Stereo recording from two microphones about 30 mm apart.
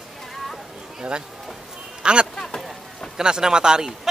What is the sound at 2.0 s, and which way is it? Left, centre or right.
Speech, right.